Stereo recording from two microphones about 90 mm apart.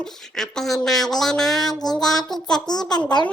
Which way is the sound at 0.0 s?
5° left (ahead or behind).